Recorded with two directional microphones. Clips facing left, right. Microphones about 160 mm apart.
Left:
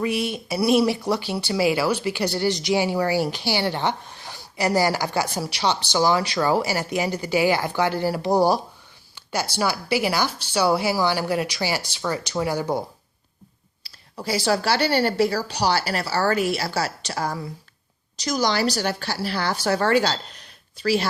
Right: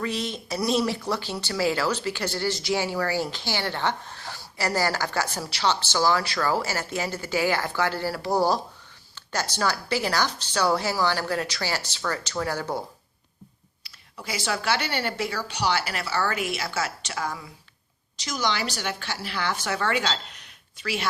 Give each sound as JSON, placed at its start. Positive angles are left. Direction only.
{"t": 0.0, "sound": "speech", "side_deg": 10}
{"t": 13.8, "sound": "speech", "side_deg": 35}